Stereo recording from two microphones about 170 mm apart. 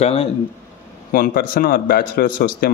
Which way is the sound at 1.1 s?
55° left (ahead or behind).